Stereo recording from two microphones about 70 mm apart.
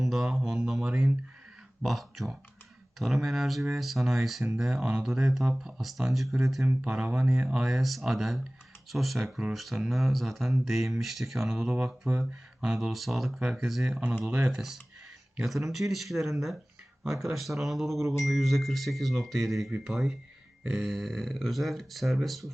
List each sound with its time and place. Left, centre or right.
0.0 s speech: centre
14.0 s speech: centre
14.5 s speech: centre